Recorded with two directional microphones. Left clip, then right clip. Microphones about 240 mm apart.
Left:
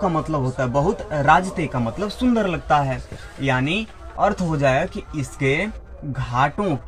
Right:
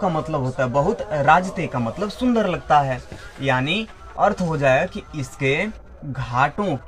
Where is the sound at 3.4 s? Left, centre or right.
Centre.